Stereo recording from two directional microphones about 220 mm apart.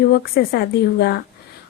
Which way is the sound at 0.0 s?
45° left (ahead or behind).